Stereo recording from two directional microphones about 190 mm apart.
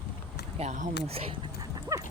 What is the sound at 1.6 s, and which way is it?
Dog, 15° right (ahead or behind).